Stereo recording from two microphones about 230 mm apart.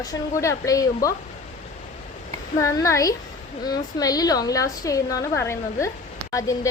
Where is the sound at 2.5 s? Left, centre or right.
Centre.